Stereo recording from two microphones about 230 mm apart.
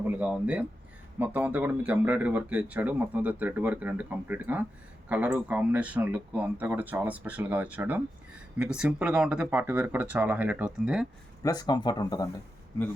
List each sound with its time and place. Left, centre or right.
0.2 s speech: centre
11.4 s speech: centre